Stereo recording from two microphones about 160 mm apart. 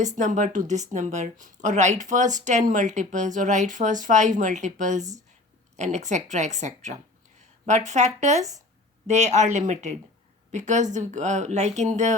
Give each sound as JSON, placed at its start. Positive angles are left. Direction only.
{"t": 0.0, "sound": "speech", "side_deg": -50}